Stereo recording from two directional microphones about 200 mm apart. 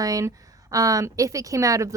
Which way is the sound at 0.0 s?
15° right (ahead or behind).